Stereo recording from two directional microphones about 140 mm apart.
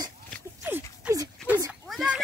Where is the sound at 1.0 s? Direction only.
5° right (ahead or behind).